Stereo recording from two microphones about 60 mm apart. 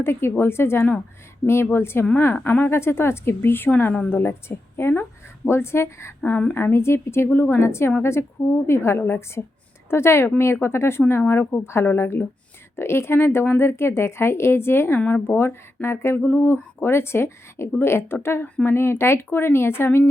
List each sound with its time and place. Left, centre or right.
0.0 s a woman's voice: left
2.3 s a woman's voice: left
7.6 s a woman's voice: left
14.9 s a woman's voice: left